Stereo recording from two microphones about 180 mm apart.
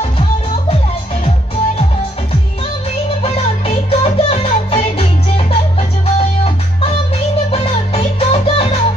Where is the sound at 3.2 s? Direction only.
35° left (ahead or behind).